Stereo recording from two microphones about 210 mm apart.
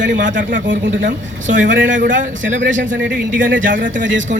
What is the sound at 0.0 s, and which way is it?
Speech, 60° right (ahead or behind).